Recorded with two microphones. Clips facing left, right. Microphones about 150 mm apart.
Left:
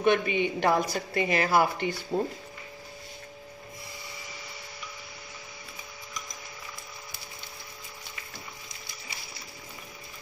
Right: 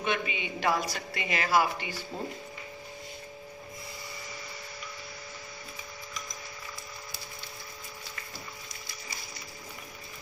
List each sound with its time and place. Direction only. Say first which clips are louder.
0.0 s a woman's voice: left 8 dB; 50° left (ahead or behind)